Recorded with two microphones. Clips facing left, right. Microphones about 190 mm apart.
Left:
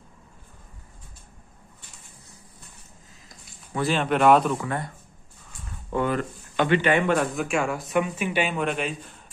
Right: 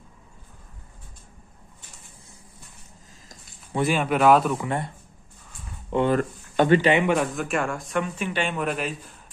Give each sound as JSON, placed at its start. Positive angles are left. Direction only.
{"t": 3.9, "sound": "a man's voice", "side_deg": -5}
{"t": 4.6, "sound": "speech", "side_deg": -25}
{"t": 6.0, "sound": "speech", "side_deg": -45}
{"t": 6.9, "sound": "speech", "side_deg": -15}
{"t": 7.3, "sound": "a man's voice", "side_deg": 0}